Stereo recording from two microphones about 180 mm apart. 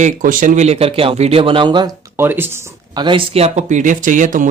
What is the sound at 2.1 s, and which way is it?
Speech, 10° right (ahead or behind).